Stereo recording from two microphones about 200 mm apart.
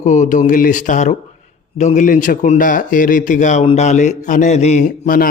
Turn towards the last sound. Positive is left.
turn(degrees=45)  # may be behind; listen again after turning